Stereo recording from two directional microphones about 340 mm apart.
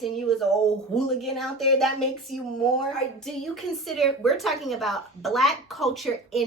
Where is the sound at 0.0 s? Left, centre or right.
Centre.